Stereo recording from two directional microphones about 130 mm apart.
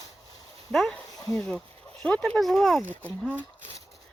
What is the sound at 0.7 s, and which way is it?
Speech, centre (ahead or behind).